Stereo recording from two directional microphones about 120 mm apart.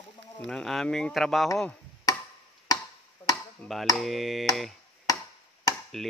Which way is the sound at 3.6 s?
15° left (ahead or behind).